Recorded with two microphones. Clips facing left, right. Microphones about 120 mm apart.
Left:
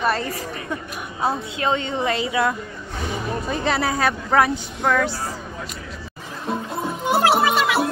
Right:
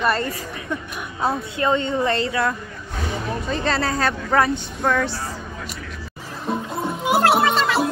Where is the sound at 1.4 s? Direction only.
25° left (ahead or behind).